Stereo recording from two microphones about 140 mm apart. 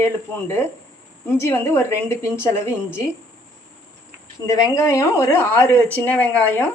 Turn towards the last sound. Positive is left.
turn(degrees=15)  # may be behind; listen again after turning